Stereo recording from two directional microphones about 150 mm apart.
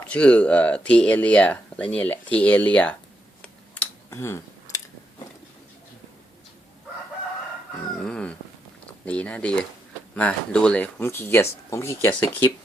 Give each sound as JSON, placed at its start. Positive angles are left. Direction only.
{"t": 0.1, "sound": "speech", "side_deg": 10}
{"t": 4.1, "sound": "a sound", "side_deg": 15}
{"t": 7.9, "sound": "chicken", "side_deg": 5}
{"t": 9.0, "sound": "speech", "side_deg": 10}